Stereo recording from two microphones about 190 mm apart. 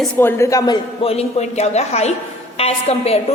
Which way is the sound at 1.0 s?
30° left (ahead or behind).